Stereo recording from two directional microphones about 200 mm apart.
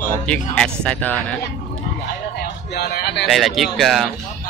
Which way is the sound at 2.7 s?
50° left (ahead or behind).